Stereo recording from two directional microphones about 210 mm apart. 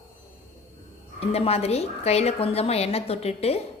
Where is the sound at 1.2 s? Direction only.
30° left (ahead or behind).